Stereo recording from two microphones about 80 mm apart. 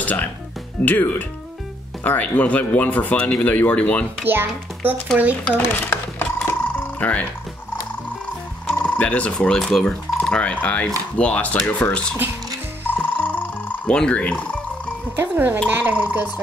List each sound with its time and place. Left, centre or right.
0.0 s speech: left
4.2 s a child's voice: right
5.4 s a sound: left
8.8 s speech: left
9.6 s speech: centre
12.9 s music: left
13.9 s speech: centre
15.1 s a child's voice: right